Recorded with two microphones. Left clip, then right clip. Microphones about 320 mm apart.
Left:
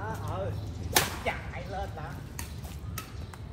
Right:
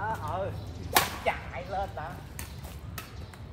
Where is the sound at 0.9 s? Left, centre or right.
Centre.